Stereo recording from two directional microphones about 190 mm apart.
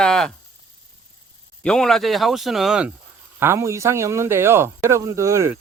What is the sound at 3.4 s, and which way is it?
Speech, 15° right (ahead or behind).